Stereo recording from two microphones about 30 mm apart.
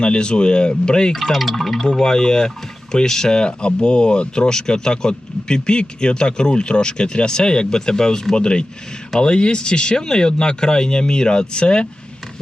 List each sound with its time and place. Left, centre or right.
0.0 s speech: left
1.3 s speech: centre
1.9 s speech: left
3.3 s speech: left
8.4 s speech: left